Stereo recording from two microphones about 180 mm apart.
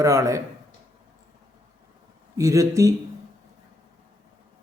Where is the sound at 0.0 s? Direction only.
15° right (ahead or behind).